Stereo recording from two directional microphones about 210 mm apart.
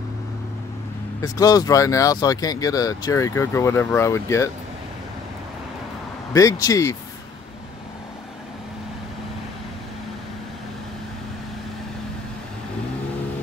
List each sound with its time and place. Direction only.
1.2 s speech: 15° left (ahead or behind)
6.3 s speech: 15° left (ahead or behind)